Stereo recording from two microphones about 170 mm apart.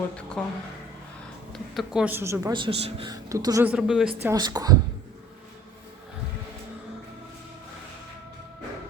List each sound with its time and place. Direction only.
0.4 s a woman's voice: 5° left (ahead or behind)
1.5 s a woman's voice: centre (ahead or behind)
2.5 s a woman's voice: 30° right (ahead or behind)
3.1 s a woman's voice: 20° right (ahead or behind)
3.7 s a woman's voice: 5° right (ahead or behind)
4.2 s a woman's voice: 20° right (ahead or behind)